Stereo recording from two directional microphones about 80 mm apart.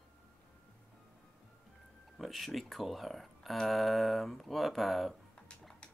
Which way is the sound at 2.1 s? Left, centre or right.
Centre.